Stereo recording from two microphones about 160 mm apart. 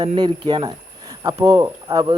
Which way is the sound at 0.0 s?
30° right (ahead or behind).